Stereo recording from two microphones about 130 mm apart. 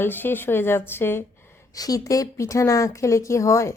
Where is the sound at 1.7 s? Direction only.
30° left (ahead or behind).